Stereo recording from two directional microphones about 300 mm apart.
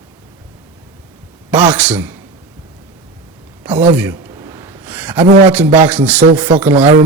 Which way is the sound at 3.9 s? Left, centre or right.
Centre.